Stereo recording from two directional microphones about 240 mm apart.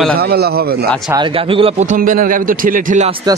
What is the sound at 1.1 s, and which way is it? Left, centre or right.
A man's voice, right.